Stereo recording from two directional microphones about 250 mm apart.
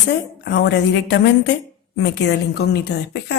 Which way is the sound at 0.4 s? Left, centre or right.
Left.